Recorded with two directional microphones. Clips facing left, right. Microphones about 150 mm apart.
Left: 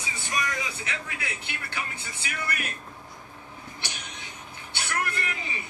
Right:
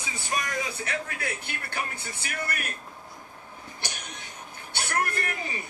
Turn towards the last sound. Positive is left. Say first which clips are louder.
# right 2 dB
turn(degrees=-45)  # may be behind; listen again after turning